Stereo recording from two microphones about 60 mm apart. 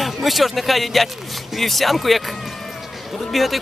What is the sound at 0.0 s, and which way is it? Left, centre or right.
Speech, centre.